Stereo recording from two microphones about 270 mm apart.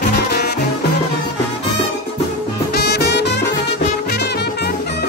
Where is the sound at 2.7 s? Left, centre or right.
Left.